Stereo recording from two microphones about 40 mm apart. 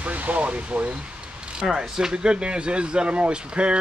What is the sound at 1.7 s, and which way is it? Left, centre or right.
Speech, centre.